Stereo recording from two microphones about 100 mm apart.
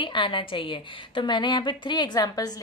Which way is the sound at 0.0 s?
55° left (ahead or behind).